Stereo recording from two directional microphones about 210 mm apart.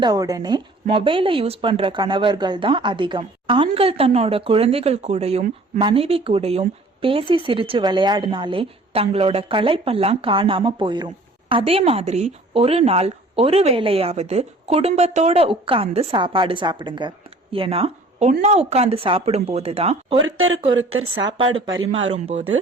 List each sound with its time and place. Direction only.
0.0 s speech: 20° right (ahead or behind)
20.2 s speech: 70° right (ahead or behind)
21.2 s speech: 20° right (ahead or behind)